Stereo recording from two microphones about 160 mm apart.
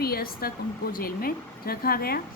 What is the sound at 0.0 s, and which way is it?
Speech, 70° left (ahead or behind).